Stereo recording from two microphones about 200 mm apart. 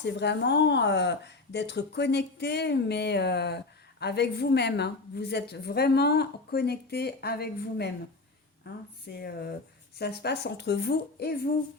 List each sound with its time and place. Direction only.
0.0 s a woman's voice: 60° left (ahead or behind)
9.1 s a woman's voice: 50° left (ahead or behind)